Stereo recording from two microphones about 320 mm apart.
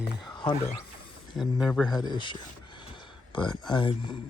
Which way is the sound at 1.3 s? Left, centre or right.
Centre.